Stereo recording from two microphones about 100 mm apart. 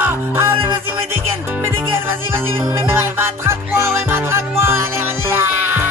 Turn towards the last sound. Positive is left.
turn(degrees=-20)  # may be behind; listen again after turning